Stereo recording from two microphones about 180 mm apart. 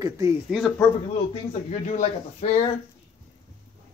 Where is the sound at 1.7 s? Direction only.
40° left (ahead or behind).